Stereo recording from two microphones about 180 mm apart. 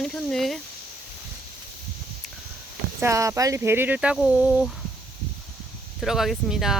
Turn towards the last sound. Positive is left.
turn(degrees=0)  # may be behind; listen again after turning